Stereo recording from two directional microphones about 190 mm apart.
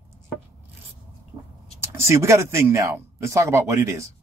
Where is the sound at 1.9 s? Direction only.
15° right (ahead or behind).